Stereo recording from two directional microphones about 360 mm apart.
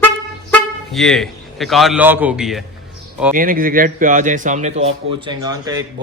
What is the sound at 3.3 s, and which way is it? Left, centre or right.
A man's voice, right.